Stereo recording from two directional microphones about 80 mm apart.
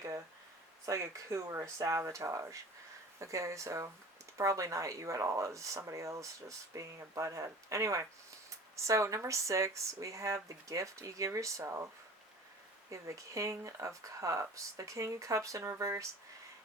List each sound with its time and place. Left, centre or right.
0.9 s speech: right
12.9 s speech: right